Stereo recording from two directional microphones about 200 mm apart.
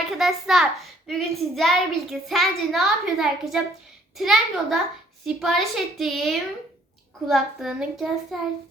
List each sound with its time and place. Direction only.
0.2 s a child's voice: centre (ahead or behind)